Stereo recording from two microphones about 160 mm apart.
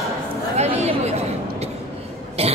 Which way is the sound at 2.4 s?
40° right (ahead or behind).